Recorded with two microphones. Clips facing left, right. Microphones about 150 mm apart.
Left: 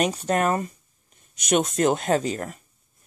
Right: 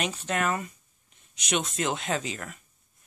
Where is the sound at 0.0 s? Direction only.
40° left (ahead or behind).